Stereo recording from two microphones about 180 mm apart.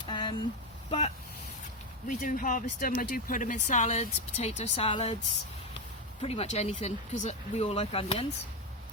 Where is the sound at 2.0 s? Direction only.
45° left (ahead or behind).